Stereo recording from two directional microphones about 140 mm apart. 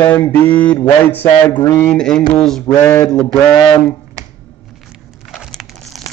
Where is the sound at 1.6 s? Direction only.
25° left (ahead or behind).